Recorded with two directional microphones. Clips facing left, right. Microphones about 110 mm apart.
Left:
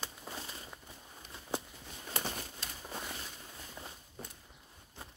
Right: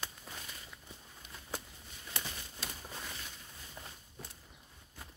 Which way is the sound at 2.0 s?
45° left (ahead or behind).